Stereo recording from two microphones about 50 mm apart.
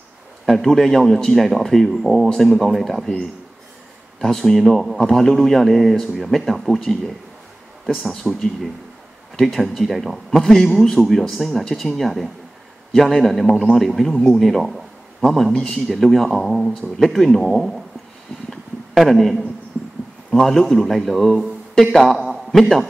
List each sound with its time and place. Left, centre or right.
0.5 s speech: centre
4.2 s speech: centre
9.6 s speech: centre
10.4 s a man's voice: centre
18.9 s speech: centre
19.7 s a sound: right
20.2 s a man's voice: centre